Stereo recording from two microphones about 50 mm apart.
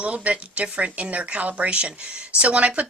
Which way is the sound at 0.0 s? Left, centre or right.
Right.